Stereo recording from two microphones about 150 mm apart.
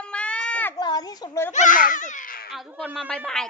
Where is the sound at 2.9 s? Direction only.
5° left (ahead or behind).